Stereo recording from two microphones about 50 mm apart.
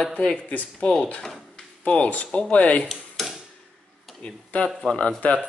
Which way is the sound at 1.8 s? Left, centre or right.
Left.